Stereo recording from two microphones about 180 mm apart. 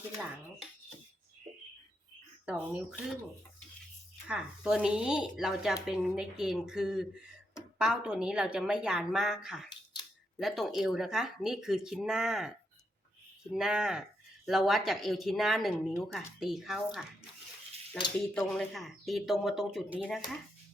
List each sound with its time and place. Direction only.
2.5 s speech: 5° right (ahead or behind)
4.3 s speech: 5° right (ahead or behind)
9.6 s scissors: 25° left (ahead or behind)
10.3 s speech: centre (ahead or behind)